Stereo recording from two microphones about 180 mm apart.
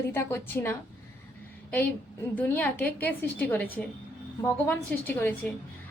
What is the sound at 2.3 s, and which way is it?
A woman's voice, 10° left (ahead or behind).